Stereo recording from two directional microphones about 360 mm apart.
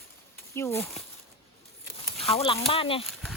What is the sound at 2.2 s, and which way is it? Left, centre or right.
Speech, centre.